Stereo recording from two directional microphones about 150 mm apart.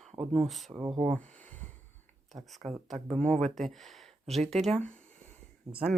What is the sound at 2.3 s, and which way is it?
Speech, centre (ahead or behind).